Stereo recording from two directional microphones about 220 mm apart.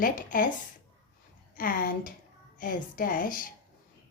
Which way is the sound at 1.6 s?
40° left (ahead or behind).